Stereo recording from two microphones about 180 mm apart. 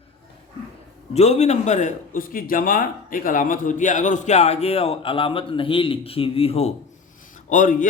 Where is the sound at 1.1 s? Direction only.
35° left (ahead or behind).